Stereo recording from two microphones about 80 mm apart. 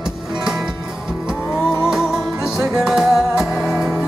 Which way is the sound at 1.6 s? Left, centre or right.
Left.